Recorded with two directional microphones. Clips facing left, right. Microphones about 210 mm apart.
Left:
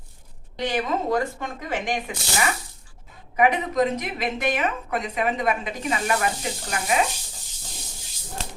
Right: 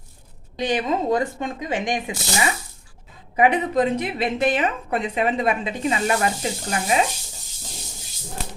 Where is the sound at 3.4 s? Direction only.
30° right (ahead or behind).